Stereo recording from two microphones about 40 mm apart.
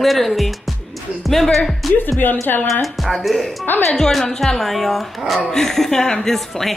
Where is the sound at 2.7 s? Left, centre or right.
Centre.